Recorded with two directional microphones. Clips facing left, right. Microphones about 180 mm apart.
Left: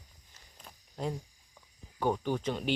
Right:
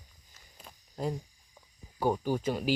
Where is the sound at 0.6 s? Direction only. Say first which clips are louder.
Right 2 dB; centre (ahead or behind).